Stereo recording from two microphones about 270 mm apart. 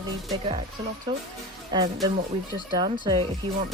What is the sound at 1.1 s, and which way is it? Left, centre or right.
Speech, centre.